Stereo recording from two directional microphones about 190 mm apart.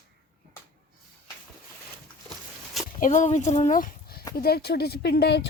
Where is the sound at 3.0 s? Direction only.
40° left (ahead or behind); by 5.4 s 60° left (ahead or behind).